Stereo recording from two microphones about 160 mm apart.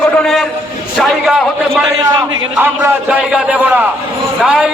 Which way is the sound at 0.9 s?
Centre (ahead or behind).